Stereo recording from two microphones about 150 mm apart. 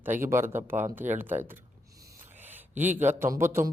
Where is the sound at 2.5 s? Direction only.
10° right (ahead or behind).